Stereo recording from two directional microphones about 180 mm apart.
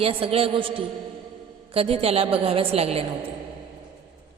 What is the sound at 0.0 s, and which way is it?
A woman's voice, 30° right (ahead or behind).